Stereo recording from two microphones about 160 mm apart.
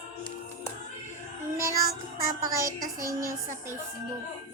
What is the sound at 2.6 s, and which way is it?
Child singing, 20° right (ahead or behind).